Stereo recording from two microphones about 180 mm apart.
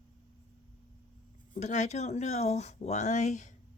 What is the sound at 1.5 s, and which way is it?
Speech, 40° left (ahead or behind).